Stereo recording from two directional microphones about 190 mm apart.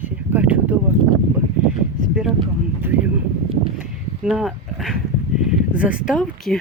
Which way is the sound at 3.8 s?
5° right (ahead or behind).